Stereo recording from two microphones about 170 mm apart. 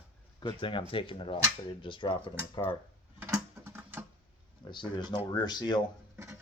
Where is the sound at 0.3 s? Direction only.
30° left (ahead or behind).